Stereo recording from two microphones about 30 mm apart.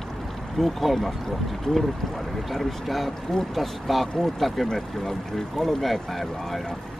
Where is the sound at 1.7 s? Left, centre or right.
Centre.